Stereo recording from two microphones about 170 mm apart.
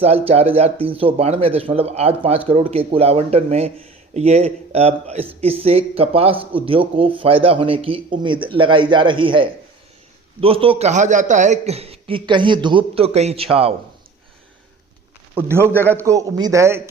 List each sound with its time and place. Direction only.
0.0 s speech: 35° right (ahead or behind)
15.4 s a man's voice: 15° right (ahead or behind)
15.7 s a man's voice: 10° left (ahead or behind)
16.0 s a man's voice: 20° right (ahead or behind)